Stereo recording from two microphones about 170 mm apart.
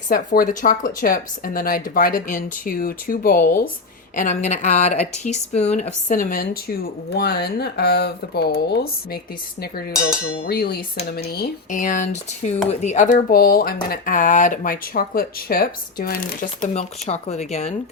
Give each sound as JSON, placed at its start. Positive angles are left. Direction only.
{"t": 0.1, "sound": "speech", "side_deg": 50}
{"t": 4.1, "sound": "speech", "side_deg": 45}
{"t": 7.1, "sound": "speech", "side_deg": 70}
{"t": 10.4, "sound": "speech", "side_deg": 65}
{"t": 11.8, "sound": "speech", "side_deg": 45}
{"t": 13.2, "sound": "speech", "side_deg": 60}